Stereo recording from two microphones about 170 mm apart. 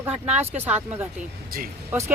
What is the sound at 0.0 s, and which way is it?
Speech, 10° right (ahead or behind).